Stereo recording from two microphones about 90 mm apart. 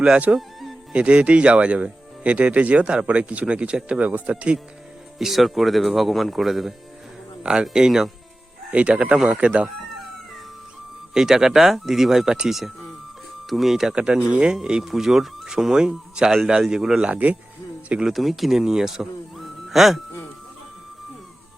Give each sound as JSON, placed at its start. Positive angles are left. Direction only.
{"t": 0.0, "sound": "speech", "side_deg": -15}
{"t": 0.3, "sound": "music", "side_deg": 0}
{"t": 0.9, "sound": "speech", "side_deg": -10}
{"t": 5.2, "sound": "speech", "side_deg": 0}
{"t": 11.1, "sound": "speech", "side_deg": -5}
{"t": 17.1, "sound": "speech", "side_deg": -15}
{"t": 18.1, "sound": "a man's voice", "side_deg": 0}